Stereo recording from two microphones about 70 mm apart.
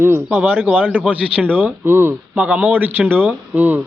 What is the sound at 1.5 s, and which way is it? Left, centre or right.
Speech, right.